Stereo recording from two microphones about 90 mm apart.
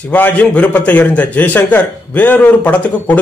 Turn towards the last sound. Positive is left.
turn(degrees=15)  # may be behind; listen again after turning